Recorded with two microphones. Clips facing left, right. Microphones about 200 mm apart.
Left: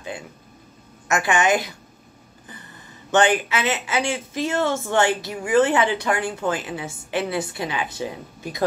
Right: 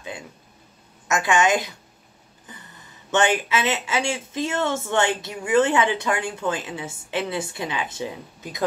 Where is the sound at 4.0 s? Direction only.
25° right (ahead or behind).